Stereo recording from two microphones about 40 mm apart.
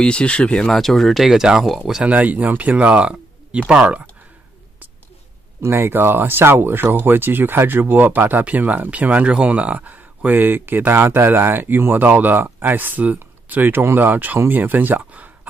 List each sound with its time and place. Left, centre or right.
0.0 s speech: left
0.7 s speech: centre
1.3 s speech: centre
2.0 s speech: right
3.6 s speech: right
5.7 s speech: right
9.8 s speech: right
10.9 s speech: right
11.2 s speech: right